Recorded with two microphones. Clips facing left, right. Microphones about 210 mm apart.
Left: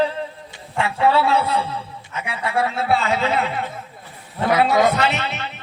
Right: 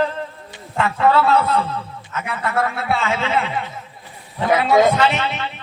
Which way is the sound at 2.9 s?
40° left (ahead or behind).